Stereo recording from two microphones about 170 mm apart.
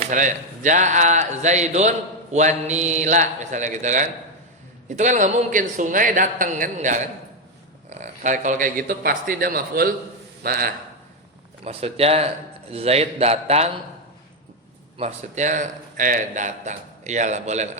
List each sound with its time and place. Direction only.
0.0 s a man's voice: 45° right (ahead or behind)
11.6 s a man's voice: 35° right (ahead or behind)
14.9 s a man's voice: 40° right (ahead or behind)